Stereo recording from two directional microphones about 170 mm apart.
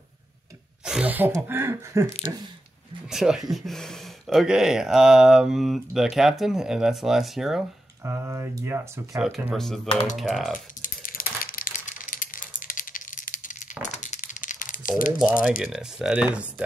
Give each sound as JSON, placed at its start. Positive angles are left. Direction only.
{"t": 0.8, "sound": "speech", "side_deg": -5}
{"t": 2.0, "sound": "speech", "side_deg": 40}
{"t": 3.1, "sound": "speech", "side_deg": -5}
{"t": 8.0, "sound": "speech", "side_deg": -15}
{"t": 9.5, "sound": "speech", "side_deg": 0}
{"t": 10.8, "sound": "crushing", "side_deg": 55}
{"t": 13.9, "sound": "crumpling", "side_deg": 45}
{"t": 15.1, "sound": "speech", "side_deg": -10}